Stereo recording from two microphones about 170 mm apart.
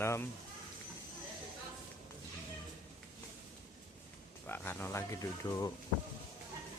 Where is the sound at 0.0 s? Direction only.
15° left (ahead or behind).